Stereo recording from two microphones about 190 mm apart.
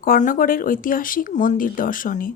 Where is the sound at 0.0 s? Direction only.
45° left (ahead or behind).